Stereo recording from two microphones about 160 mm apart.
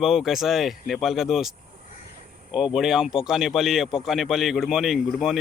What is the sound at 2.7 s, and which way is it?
Speech, 5° right (ahead or behind).